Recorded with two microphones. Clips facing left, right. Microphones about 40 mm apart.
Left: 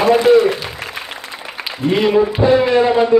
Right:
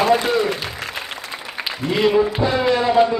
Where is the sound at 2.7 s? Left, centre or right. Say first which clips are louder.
Left 5 dB; left.